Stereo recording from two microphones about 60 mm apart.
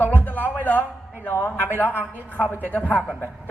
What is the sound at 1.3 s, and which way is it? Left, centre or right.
Speech, left.